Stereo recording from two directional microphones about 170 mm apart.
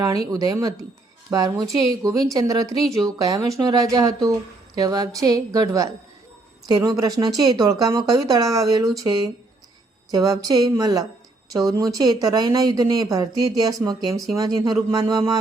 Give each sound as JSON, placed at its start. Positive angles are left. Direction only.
{"t": 0.3, "sound": "speech", "side_deg": -20}